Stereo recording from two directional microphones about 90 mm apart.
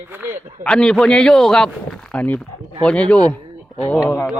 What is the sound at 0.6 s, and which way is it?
Speech, 10° left (ahead or behind).